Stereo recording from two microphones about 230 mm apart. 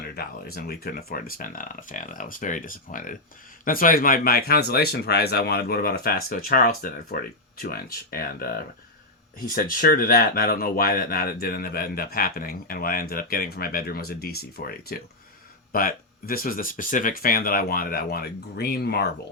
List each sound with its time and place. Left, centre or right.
0.2 s speech: left